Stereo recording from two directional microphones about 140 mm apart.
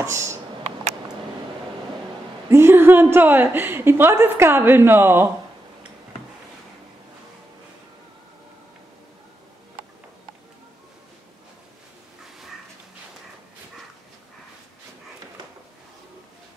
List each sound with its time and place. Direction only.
0.0 s speech: 20° right (ahead or behind)
2.5 s a woman's voice: 15° right (ahead or behind)